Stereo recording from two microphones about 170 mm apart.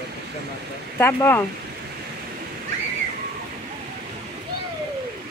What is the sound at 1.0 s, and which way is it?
Speech, 10° left (ahead or behind).